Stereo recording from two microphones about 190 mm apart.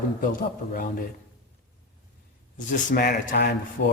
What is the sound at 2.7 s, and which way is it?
A man's voice, 45° left (ahead or behind).